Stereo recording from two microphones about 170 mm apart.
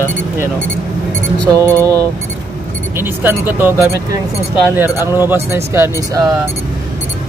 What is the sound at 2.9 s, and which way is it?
Speech, 10° right (ahead or behind).